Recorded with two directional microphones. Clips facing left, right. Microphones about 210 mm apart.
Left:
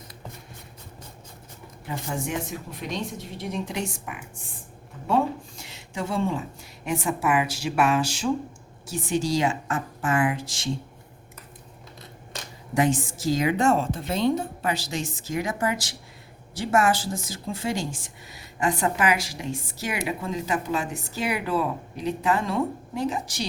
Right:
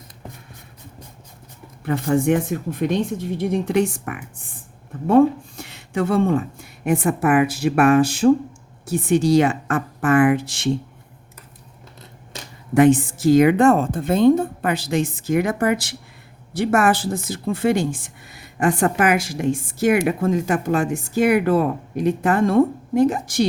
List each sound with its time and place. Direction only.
1.8 s a woman's voice: 60° right (ahead or behind)
12.7 s a woman's voice: 60° right (ahead or behind)